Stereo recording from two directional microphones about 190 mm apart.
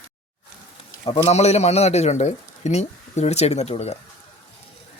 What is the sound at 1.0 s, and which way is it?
A man's voice, 30° left (ahead or behind).